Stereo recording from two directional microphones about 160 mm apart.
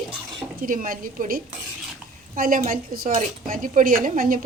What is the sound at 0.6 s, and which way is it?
A woman's voice, 60° right (ahead or behind).